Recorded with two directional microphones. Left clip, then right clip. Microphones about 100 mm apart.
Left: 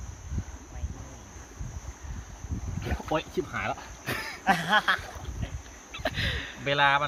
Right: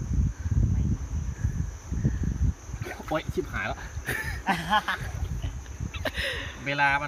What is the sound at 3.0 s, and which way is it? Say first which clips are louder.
Speech: even; 50° right (ahead or behind).